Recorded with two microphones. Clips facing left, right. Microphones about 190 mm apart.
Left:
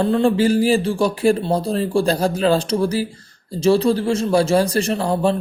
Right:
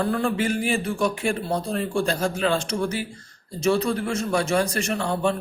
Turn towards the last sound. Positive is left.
turn(degrees=35)  # may be behind; listen again after turning